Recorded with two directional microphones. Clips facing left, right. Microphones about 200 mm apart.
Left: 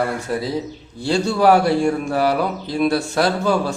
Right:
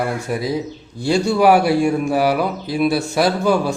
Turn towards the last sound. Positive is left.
turn(degrees=-10)  # may be behind; listen again after turning